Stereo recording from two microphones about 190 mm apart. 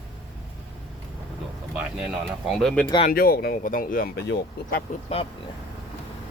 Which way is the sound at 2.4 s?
Centre (ahead or behind).